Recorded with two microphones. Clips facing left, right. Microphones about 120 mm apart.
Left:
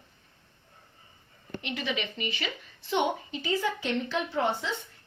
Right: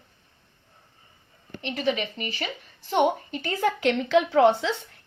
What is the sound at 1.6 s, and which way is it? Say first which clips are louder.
A woman's voice: right 6 dB; 35° right (ahead or behind).